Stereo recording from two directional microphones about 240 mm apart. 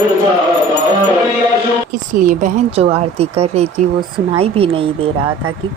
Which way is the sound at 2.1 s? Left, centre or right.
Right.